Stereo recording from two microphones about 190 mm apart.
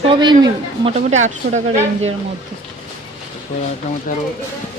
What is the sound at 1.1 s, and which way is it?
Speech, 40° right (ahead or behind).